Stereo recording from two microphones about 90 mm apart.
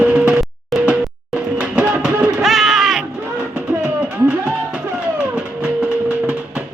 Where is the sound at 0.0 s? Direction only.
15° right (ahead or behind).